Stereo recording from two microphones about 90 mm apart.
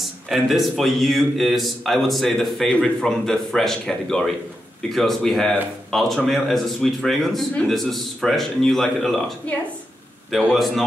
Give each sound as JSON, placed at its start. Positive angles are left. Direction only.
{"t": 0.0, "sound": "a man's voice", "side_deg": 0}
{"t": 9.5, "sound": "a woman's voice", "side_deg": 15}
{"t": 10.3, "sound": "a man's voice", "side_deg": 0}